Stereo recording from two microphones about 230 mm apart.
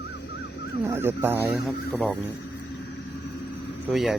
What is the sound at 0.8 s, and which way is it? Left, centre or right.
Speech, centre.